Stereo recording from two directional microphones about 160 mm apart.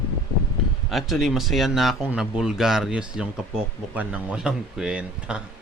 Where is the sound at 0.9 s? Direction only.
Centre (ahead or behind).